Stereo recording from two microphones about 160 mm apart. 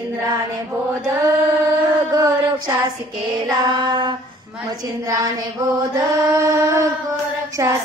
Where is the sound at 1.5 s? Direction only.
20° right (ahead or behind).